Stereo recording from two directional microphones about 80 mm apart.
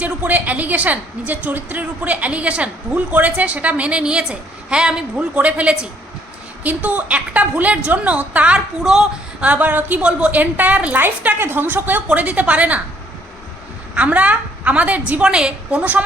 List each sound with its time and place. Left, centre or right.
0.0 s a woman's voice: right
8.8 s speech: centre
9.4 s a woman's voice: centre
13.9 s a woman's voice: centre